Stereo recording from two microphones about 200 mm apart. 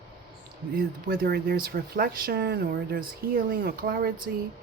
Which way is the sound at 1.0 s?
45° right (ahead or behind).